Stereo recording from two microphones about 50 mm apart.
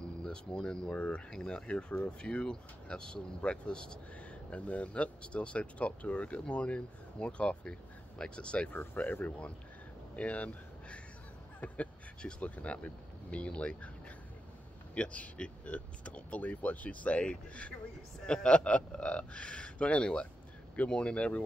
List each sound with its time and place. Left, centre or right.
0.0 s speech: centre
0.9 s speech: left
1.3 s speech: centre
9.0 s speech: left
10.1 s speech: left
15.0 s speech: left